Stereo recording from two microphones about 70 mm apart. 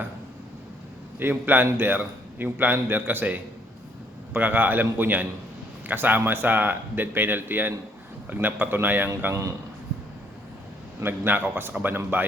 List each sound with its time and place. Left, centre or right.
1.2 s a man's voice: right
9.3 s speech: right
11.0 s a man's voice: right